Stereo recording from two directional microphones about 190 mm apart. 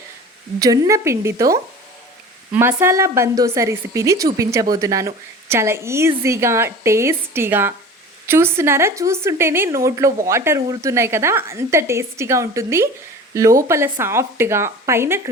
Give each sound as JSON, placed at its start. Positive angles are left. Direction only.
{"t": 0.6, "sound": "speech", "side_deg": -20}